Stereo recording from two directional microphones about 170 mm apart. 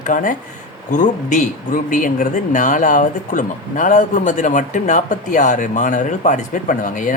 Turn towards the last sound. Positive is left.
turn(degrees=50)  # may be behind; listen again after turning